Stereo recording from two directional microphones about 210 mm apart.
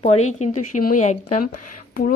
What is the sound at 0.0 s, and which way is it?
Speech, 30° left (ahead or behind).